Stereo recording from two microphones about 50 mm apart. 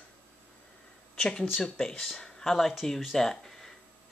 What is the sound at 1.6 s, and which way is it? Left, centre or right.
Speech, centre.